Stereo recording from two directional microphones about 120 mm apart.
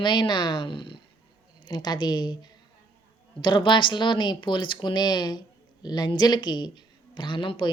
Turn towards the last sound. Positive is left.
turn(degrees=45)  # may be behind; listen again after turning